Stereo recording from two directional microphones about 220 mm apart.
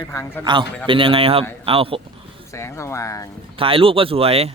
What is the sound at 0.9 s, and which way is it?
Speech, 25° right (ahead or behind).